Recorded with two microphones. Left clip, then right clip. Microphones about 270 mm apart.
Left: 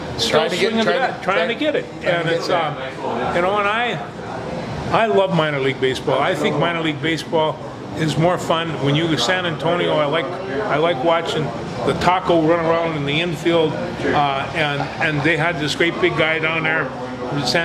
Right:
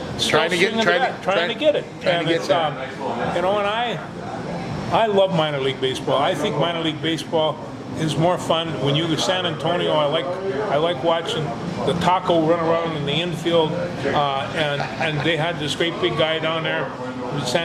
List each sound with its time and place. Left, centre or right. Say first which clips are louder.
0.3 s a man's voice: left 1 dB; right
1.5 s a man's voice: right 1 dB; centre
3.3 s a man's voice: left 3 dB; left